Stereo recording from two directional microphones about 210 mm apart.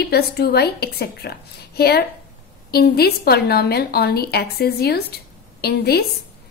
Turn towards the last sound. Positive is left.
turn(degrees=50)  # may be behind; listen again after turning